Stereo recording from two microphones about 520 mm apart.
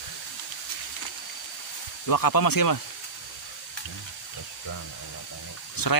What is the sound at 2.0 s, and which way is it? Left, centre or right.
Speech, left.